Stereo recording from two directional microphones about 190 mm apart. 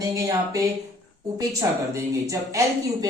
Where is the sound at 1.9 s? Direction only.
15° right (ahead or behind).